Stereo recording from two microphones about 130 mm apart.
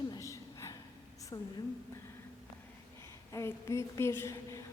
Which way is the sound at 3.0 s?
20° left (ahead or behind).